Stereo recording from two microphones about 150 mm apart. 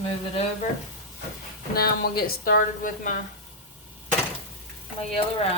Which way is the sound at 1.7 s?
90° left.